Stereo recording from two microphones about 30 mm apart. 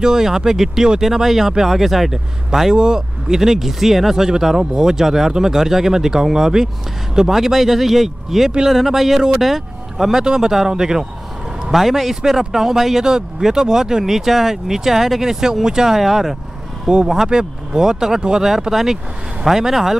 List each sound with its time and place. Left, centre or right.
0.0 s speech: centre
2.7 s speech: right; by 10.2 s centre
10.2 s speech: right
11.6 s speech: centre